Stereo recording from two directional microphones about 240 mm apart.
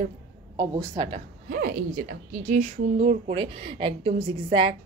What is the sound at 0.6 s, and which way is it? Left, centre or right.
Speech, centre.